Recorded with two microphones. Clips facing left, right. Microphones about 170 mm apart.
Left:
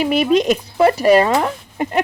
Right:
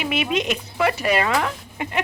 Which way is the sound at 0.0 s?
40° left (ahead or behind).